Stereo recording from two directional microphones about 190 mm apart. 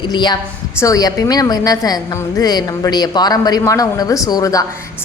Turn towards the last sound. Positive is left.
turn(degrees=20)  # may be behind; listen again after turning